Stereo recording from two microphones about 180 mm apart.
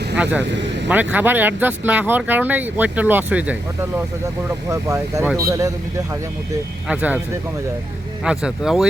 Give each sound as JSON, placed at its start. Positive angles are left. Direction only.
{"t": 0.2, "sound": "speech", "side_deg": -10}
{"t": 6.8, "sound": "speech", "side_deg": -5}
{"t": 8.2, "sound": "speech", "side_deg": -5}